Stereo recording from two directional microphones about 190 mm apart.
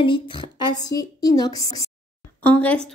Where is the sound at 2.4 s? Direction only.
10° left (ahead or behind).